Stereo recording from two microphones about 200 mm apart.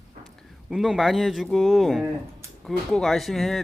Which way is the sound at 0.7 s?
5° right (ahead or behind).